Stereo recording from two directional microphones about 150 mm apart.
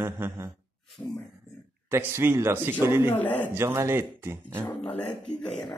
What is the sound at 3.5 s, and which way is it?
Speech, 15° right (ahead or behind).